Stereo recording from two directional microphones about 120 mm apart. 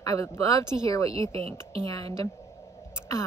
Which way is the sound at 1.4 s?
55° right (ahead or behind).